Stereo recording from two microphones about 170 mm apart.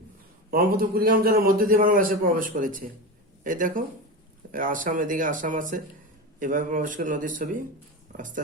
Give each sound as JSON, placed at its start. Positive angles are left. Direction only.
{"t": 0.5, "sound": "a man's voice", "side_deg": -60}